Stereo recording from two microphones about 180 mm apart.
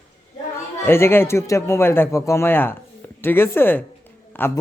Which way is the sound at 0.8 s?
15° left (ahead or behind).